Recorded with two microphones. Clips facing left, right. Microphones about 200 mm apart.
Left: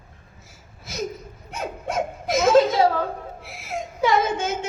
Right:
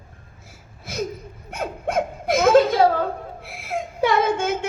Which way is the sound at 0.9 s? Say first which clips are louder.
Right 2 dB; 55° right (ahead or behind).